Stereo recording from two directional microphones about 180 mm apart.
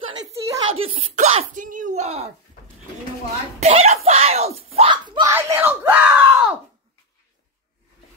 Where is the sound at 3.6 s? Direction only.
35° right (ahead or behind).